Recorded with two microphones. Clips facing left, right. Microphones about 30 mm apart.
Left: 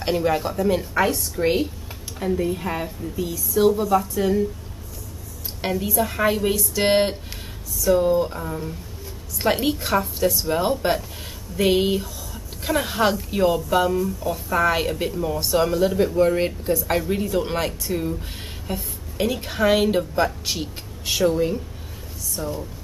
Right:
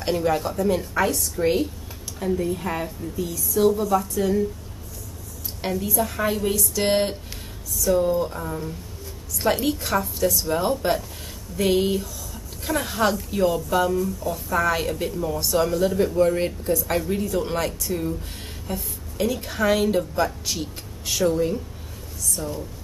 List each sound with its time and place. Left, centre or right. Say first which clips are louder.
0.0 s speech: left 1 dB; centre
5.6 s a woman's voice: left 2 dB; centre
8.4 s speech: left 1 dB; centre
9.4 s a woman's voice: left 1 dB; centre